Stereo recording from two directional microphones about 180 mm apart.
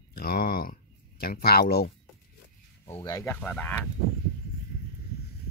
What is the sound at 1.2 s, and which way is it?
Speech, 60° left (ahead or behind).